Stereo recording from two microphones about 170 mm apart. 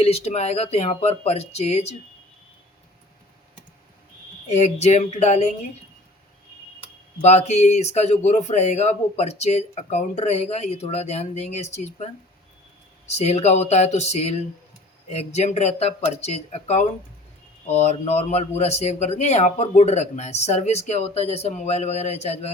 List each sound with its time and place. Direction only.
0.0 s speech: 35° left (ahead or behind)
4.4 s speech: 40° left (ahead or behind)
7.2 s speech: 40° left (ahead or behind)
13.1 s speech: 40° left (ahead or behind)